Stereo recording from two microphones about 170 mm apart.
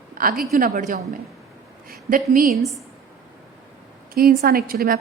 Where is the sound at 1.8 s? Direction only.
60° right (ahead or behind).